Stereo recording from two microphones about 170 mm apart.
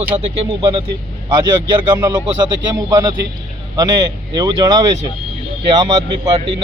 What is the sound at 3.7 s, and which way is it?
A man's voice, 20° right (ahead or behind).